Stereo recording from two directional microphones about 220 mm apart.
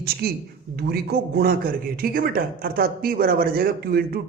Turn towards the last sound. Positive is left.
turn(degrees=-45)  # may be behind; listen again after turning